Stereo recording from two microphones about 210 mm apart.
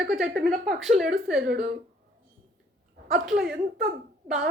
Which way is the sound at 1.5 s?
45° right (ahead or behind).